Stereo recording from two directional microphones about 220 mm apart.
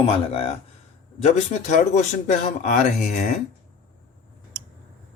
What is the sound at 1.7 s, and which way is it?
Speech, 35° left (ahead or behind).